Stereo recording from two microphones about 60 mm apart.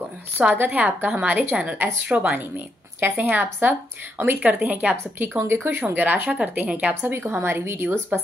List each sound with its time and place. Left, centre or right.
0.6 s speech: right
1.5 s a woman's voice: centre
5.4 s speech: right; by 7.0 s centre
7.0 s speech: right